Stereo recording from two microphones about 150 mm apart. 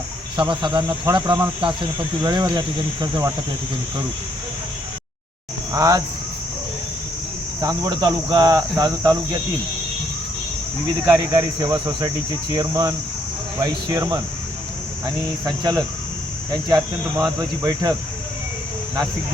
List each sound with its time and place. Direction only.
0.3 s cricket: 30° right (ahead or behind)
5.7 s cricket: 25° right (ahead or behind)
7.6 s cricket: 25° right (ahead or behind)
11.2 s cricket: 20° right (ahead or behind)